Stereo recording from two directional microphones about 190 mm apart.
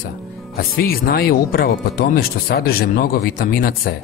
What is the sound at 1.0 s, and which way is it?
Speech, 55° left (ahead or behind).